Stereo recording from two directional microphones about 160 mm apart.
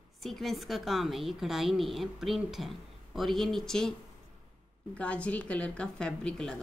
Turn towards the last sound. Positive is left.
turn(degrees=5)  # may be behind; listen again after turning